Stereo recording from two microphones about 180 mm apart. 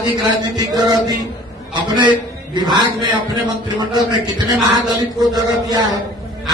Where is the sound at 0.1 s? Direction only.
20° right (ahead or behind).